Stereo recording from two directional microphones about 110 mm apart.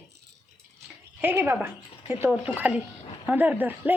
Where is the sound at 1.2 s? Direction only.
20° right (ahead or behind).